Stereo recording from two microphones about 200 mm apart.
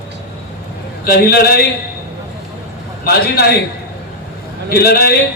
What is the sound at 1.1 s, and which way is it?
Speech, 50° left (ahead or behind).